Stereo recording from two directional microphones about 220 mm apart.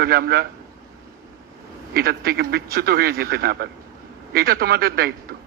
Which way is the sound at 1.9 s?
45° right (ahead or behind).